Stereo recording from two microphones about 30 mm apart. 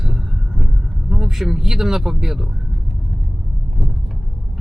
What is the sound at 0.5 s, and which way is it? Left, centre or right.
Vehicle, centre.